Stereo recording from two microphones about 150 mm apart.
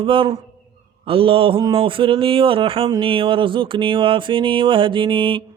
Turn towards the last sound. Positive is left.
turn(degrees=-35)  # may be behind; listen again after turning